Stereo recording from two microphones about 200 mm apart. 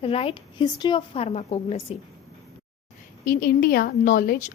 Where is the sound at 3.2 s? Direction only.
45° left (ahead or behind).